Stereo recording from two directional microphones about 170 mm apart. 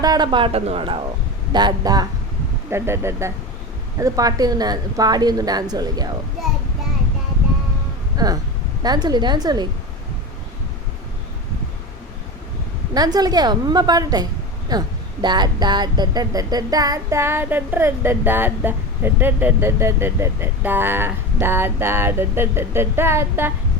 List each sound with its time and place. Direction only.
0.0 s a woman's voice: 25° right (ahead or behind)
1.5 s a woman's voice: 25° right (ahead or behind)
8.1 s a woman's voice: 20° right (ahead or behind)
12.9 s a woman's voice: 20° right (ahead or behind)